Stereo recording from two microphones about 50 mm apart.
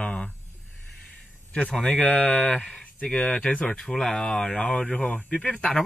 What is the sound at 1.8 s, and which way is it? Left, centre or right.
Speech, left.